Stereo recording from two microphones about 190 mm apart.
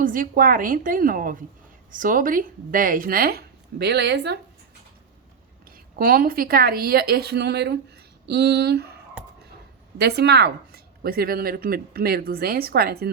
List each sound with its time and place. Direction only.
0.0 s a woman's voice: 45° right (ahead or behind); by 4.4 s 60° right (ahead or behind)
5.7 s a woman's voice: 50° right (ahead or behind)
10.0 s a woman's voice: 60° right (ahead or behind)